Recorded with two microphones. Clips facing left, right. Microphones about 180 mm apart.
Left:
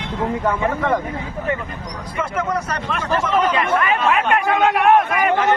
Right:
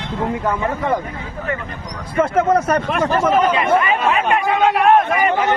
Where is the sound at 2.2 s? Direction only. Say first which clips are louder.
Right 8 dB; 55° right (ahead or behind).